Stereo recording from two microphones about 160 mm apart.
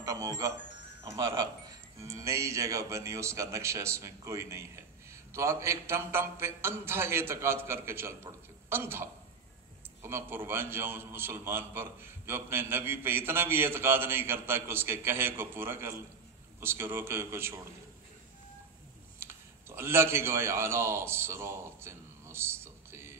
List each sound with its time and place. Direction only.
0.0 s music: 20° right (ahead or behind)
1.0 s speech: 25° right (ahead or behind)
19.7 s a man's voice: 15° right (ahead or behind)